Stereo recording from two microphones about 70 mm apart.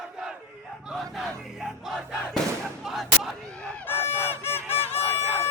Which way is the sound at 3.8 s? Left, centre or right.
Left.